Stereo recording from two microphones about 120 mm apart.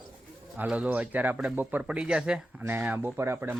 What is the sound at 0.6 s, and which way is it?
Speech, 10° right (ahead or behind).